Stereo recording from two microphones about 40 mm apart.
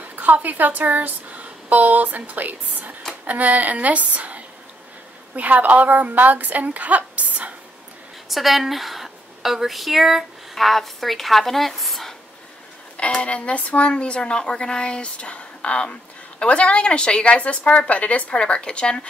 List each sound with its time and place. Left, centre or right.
0.1 s a woman's voice: right
8.3 s a woman's voice: centre
12.9 s speech: left
17.3 s a woman's voice: left